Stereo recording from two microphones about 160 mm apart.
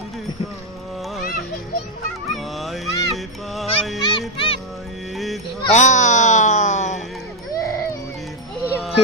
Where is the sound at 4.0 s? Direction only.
30° left (ahead or behind).